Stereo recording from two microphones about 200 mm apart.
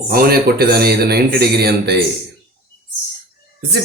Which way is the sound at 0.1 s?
50° right (ahead or behind).